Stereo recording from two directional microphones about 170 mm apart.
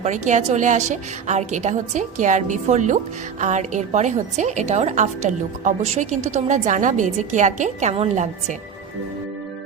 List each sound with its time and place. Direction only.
0.0 s a woman's voice: 45° right (ahead or behind)